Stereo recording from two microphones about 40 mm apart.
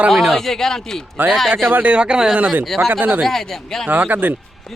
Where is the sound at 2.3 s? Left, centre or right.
Right.